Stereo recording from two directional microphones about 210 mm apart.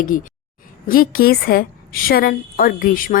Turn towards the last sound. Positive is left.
turn(degrees=40)  # may be behind; listen again after turning